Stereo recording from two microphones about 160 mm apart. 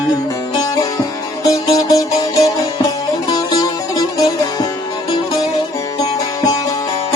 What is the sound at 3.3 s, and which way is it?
Music, 25° left (ahead or behind).